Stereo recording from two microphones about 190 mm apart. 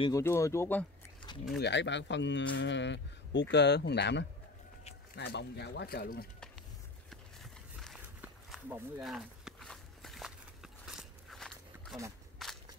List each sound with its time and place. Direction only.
0.2 s speech: 15° left (ahead or behind)
1.6 s speech: 70° left (ahead or behind); by 6.2 s 50° left (ahead or behind)
8.2 s a sound: 10° right (ahead or behind)
9.0 s walk: centre (ahead or behind)